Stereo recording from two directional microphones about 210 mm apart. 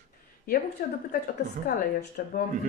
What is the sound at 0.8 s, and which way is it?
Speech, 45° left (ahead or behind).